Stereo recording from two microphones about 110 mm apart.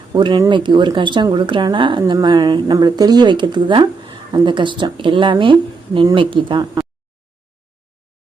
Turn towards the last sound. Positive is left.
turn(degrees=-50)  # may be behind; listen again after turning